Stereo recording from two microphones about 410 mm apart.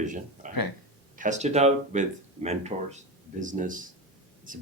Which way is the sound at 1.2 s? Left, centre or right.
Centre.